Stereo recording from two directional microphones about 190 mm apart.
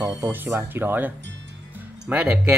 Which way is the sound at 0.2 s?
10° right (ahead or behind).